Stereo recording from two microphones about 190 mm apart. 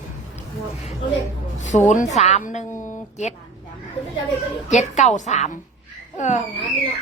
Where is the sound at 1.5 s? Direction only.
40° left (ahead or behind).